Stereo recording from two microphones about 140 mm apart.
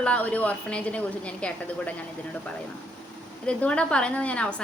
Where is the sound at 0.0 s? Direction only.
10° left (ahead or behind).